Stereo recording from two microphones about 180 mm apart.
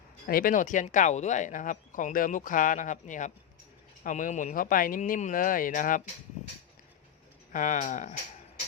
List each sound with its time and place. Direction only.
0.3 s speech: 50° left (ahead or behind)
7.5 s speech: 45° left (ahead or behind)